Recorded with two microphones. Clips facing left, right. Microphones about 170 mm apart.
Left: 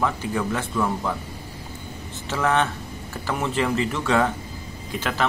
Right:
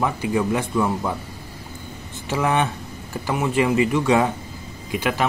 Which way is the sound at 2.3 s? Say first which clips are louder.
Right 1 dB; 15° right (ahead or behind).